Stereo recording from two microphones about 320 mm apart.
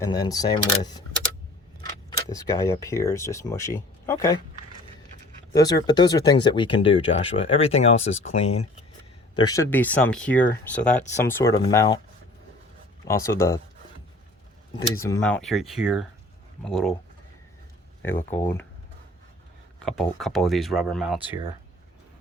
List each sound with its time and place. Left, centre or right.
0.0 s speech: centre
5.5 s speech: centre
13.1 s speech: centre
14.9 s speech: centre
18.0 s speech: centre
19.8 s speech: centre